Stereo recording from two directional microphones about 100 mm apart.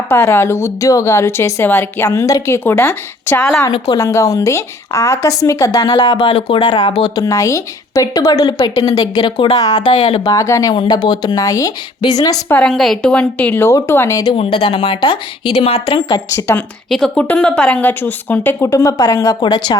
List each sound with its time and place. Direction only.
0.1 s a woman's voice: 25° left (ahead or behind)
2.0 s a woman's voice: 35° left (ahead or behind)
2.6 s a woman's voice: 20° left (ahead or behind)
3.9 s a woman's voice: 35° left (ahead or behind); by 6.9 s 50° left (ahead or behind)
7.2 s a woman's voice: 35° left (ahead or behind)
10.8 s a woman's voice: 45° left (ahead or behind)
12.6 s a woman's voice: 5° left (ahead or behind); by 14.1 s 25° left (ahead or behind)
14.1 s a woman's voice: 40° left (ahead or behind)
14.3 s speech: 65° left (ahead or behind)
15.9 s a woman's voice: 40° left (ahead or behind)
16.9 s a woman's voice: 5° left (ahead or behind)
18.7 s a woman's voice: 35° left (ahead or behind)